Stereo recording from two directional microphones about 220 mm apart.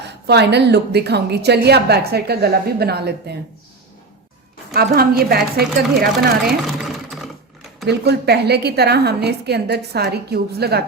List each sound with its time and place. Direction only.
0.0 s a woman's voice: 50° right (ahead or behind)
4.7 s a woman's voice: 45° right (ahead or behind)
6.6 s sewing machine: centre (ahead or behind)
7.9 s a woman's voice: 50° right (ahead or behind)